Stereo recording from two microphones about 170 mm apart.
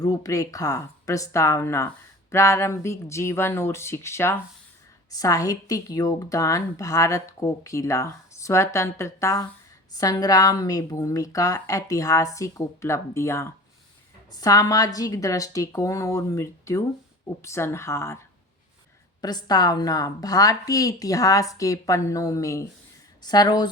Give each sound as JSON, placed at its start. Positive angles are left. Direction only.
{"t": 0.0, "sound": "a woman's voice", "side_deg": 20}
{"t": 19.2, "sound": "a woman's voice", "side_deg": 25}